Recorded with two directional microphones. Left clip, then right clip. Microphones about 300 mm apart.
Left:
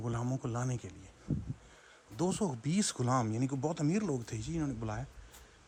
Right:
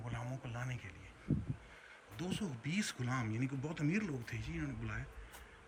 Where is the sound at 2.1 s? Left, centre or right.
Centre.